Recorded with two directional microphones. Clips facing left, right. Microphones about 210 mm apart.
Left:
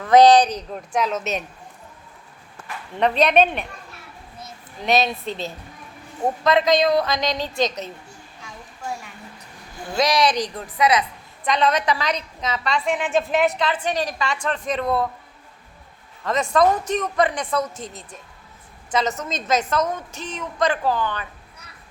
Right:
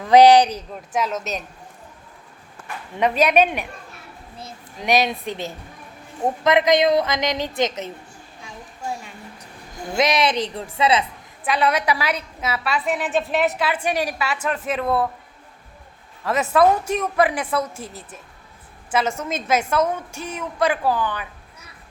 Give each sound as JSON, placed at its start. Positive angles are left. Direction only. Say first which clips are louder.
{"t": 0.0, "sound": "a woman's voice", "louder": "right 1 dB", "side_deg": -10}
{"t": 3.0, "sound": "a woman's voice", "louder": "even", "side_deg": -10}
{"t": 4.8, "sound": "a woman's voice", "louder": "even", "side_deg": -15}
{"t": 9.9, "sound": "a woman's voice", "louder": "even", "side_deg": -20}
{"t": 11.4, "sound": "a woman's voice", "louder": "even", "side_deg": -10}
{"t": 16.2, "sound": "a woman's voice", "louder": "right 1 dB", "side_deg": -5}